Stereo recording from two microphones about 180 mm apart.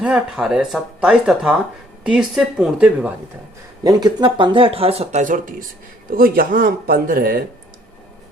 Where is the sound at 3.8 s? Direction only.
20° right (ahead or behind); by 7.4 s 50° right (ahead or behind).